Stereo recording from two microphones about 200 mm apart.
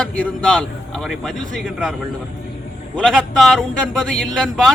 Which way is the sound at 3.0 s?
Centre (ahead or behind).